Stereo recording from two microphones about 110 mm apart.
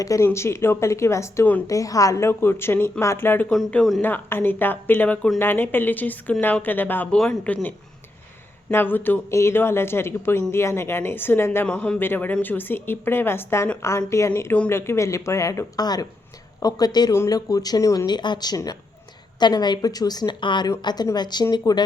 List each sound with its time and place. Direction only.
0.0 s a woman's voice: 30° left (ahead or behind)
3.5 s speech: 5° left (ahead or behind)
4.0 s speech: 20° left (ahead or behind)
8.7 s a woman's voice: 20° left (ahead or behind)
11.7 s a woman's voice: 10° left (ahead or behind); by 21.8 s 40° left (ahead or behind)